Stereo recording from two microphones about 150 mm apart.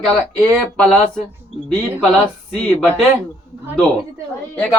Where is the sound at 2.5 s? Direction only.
5° left (ahead or behind).